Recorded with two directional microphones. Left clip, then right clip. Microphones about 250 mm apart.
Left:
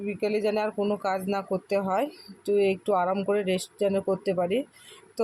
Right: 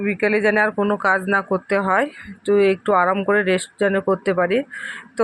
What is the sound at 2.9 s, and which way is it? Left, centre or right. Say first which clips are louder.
Speech: right 8 dB; right.